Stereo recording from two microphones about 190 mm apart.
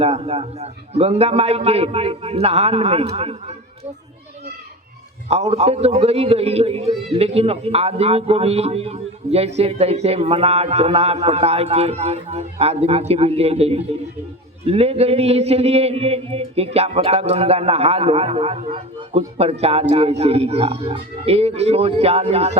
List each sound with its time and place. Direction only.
0.0 s a man's voice: 30° right (ahead or behind)
5.3 s a man's voice: 35° right (ahead or behind)